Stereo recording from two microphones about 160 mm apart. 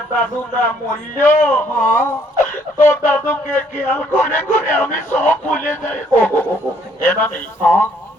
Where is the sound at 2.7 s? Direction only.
20° left (ahead or behind).